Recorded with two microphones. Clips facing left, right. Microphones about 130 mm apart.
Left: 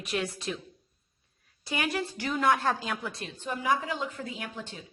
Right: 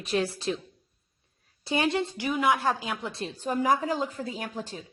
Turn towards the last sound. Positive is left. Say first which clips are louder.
# right 4 dB
turn(degrees=-40)  # may be behind; listen again after turning